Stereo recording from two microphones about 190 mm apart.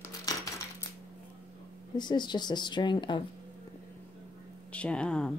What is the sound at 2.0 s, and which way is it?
Speech, 25° left (ahead or behind).